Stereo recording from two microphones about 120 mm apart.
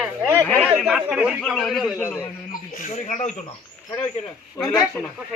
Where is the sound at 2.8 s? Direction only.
90° left.